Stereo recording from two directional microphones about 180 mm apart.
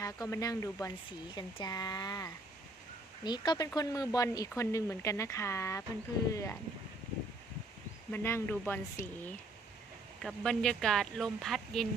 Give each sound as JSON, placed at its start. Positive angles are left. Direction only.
{"t": 0.0, "sound": "speech", "side_deg": 20}
{"t": 8.1, "sound": "speech", "side_deg": 15}